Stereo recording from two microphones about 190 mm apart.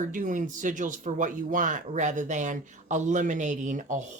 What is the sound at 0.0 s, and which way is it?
Speech, 45° right (ahead or behind).